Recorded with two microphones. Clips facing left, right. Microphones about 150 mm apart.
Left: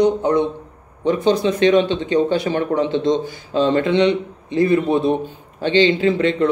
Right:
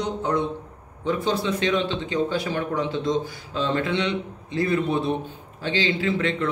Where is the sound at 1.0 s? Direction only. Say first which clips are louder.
Left 7 dB; 70° left (ahead or behind).